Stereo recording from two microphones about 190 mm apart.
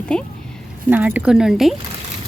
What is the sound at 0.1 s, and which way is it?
Speech, 5° left (ahead or behind).